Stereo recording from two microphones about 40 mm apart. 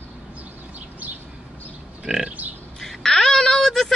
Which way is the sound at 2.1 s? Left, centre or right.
Centre.